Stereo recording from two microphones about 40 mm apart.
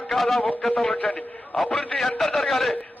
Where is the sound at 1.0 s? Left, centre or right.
Left.